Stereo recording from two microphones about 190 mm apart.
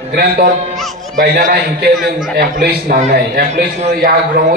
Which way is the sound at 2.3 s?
50° right (ahead or behind).